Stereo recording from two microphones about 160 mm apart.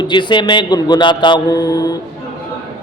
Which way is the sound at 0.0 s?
30° left (ahead or behind).